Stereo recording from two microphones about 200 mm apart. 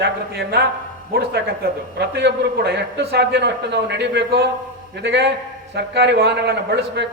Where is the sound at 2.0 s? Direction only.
55° right (ahead or behind).